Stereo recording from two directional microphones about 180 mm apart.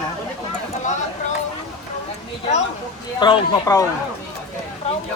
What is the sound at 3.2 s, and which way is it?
Speech, 25° left (ahead or behind).